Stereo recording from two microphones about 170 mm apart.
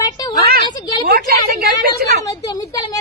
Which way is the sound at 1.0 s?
60° right (ahead or behind).